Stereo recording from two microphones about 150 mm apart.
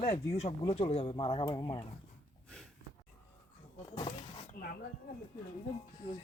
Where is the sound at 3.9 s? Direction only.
30° left (ahead or behind).